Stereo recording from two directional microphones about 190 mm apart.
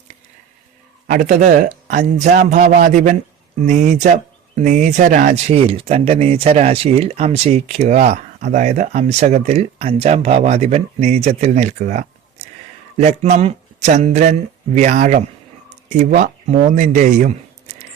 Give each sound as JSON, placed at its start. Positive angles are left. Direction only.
{"t": 1.0, "sound": "speech", "side_deg": -45}